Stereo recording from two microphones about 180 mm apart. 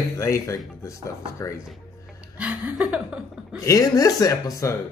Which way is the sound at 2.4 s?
5° right (ahead or behind).